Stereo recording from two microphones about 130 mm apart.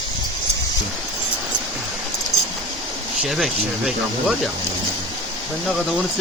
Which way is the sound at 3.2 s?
5° right (ahead or behind).